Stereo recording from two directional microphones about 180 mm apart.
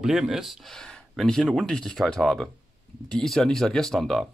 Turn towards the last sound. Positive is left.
turn(degrees=0)  # may be behind; listen again after turning